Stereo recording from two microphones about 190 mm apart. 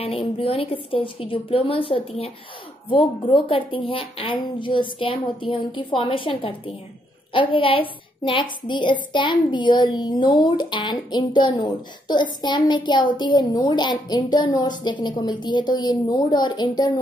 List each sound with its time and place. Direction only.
0.0 s a woman's voice: 30° left (ahead or behind)